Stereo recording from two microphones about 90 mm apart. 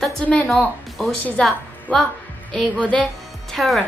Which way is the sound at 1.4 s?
5° left (ahead or behind).